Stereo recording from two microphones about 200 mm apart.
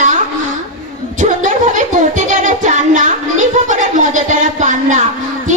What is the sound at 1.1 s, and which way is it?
Music, 40° right (ahead or behind).